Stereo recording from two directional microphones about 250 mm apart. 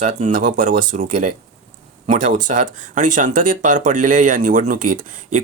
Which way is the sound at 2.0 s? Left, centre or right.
Right.